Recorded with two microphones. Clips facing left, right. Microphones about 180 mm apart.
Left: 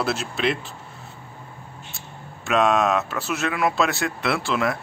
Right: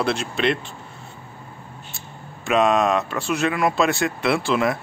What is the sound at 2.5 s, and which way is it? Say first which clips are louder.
Speech: right 1 dB; centre (ahead or behind).